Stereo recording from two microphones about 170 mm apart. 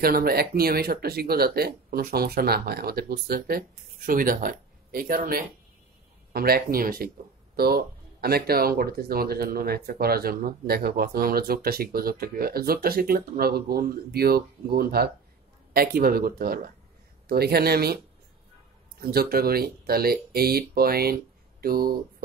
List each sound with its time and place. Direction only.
0.0 s speech: 60° right (ahead or behind)